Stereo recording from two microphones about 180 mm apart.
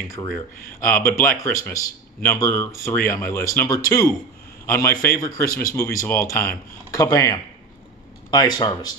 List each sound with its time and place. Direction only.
0.2 s speech: 20° left (ahead or behind)